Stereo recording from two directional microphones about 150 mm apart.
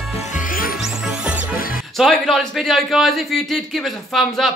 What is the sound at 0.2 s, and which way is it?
Music, 55° left (ahead or behind).